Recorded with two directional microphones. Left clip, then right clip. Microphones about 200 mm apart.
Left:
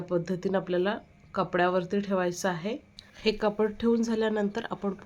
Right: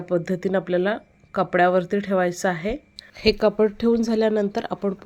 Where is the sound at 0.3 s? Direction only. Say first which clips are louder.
Right 6 dB; 20° right (ahead or behind).